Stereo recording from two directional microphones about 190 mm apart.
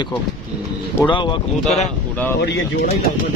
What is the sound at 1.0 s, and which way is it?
Speech, 25° left (ahead or behind).